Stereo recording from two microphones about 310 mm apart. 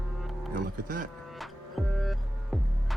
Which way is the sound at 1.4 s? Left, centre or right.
Centre.